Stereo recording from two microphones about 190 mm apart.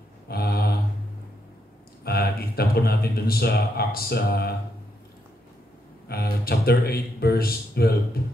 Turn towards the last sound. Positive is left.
turn(degrees=55)  # may be behind; listen again after turning